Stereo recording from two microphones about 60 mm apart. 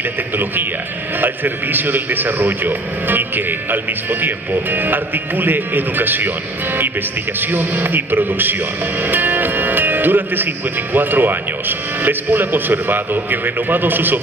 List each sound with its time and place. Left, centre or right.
1.2 s a man's voice: right